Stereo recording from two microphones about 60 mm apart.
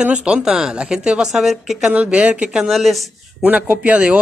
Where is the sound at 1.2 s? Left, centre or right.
Centre.